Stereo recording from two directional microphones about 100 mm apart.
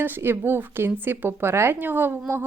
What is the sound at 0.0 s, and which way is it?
Speech, 20° right (ahead or behind).